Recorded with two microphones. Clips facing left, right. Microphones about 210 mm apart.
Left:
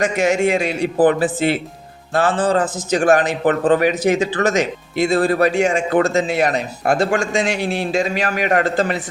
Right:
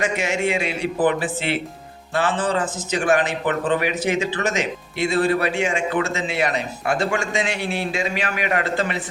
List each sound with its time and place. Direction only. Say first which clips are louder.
0.0 s speech: left 6 dB; 40° left (ahead or behind)